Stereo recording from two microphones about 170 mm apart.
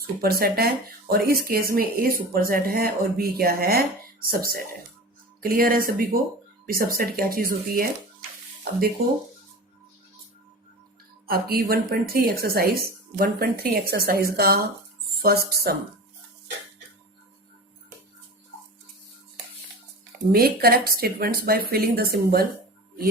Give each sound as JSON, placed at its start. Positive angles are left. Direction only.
{"t": 0.2, "sound": "speech", "side_deg": -60}
{"t": 11.3, "sound": "speech", "side_deg": -60}
{"t": 20.3, "sound": "speech", "side_deg": -65}